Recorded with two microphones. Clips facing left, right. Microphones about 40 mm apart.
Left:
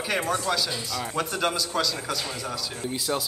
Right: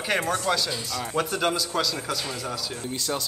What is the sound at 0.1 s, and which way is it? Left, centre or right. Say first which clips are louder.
Speech: right 2 dB; centre.